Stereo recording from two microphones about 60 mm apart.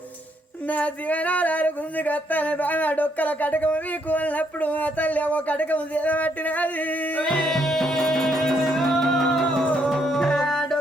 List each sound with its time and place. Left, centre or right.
0.7 s a sound: left
7.5 s music: centre
9.6 s music: left
9.9 s music: centre